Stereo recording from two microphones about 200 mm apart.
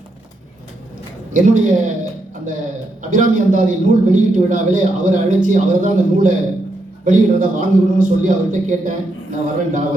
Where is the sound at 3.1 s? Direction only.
40° right (ahead or behind).